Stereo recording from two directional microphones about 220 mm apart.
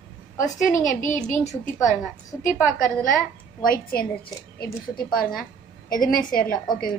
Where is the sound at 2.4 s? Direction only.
35° left (ahead or behind).